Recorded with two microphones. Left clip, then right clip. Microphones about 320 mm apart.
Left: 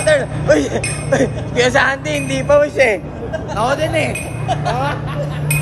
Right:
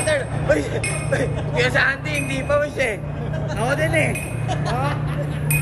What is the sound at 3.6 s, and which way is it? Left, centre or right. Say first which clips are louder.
Speech: left 4 dB; centre.